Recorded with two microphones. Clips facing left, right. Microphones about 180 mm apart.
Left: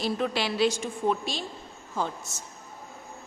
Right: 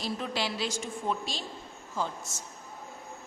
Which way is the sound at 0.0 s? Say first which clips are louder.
Left 5 dB; 65° left (ahead or behind).